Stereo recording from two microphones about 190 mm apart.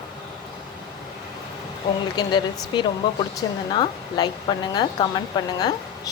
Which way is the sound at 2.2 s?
20° left (ahead or behind).